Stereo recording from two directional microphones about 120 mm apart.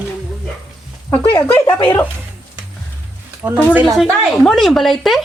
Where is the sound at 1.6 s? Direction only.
35° left (ahead or behind).